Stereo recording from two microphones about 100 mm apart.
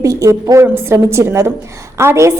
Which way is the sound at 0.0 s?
30° right (ahead or behind).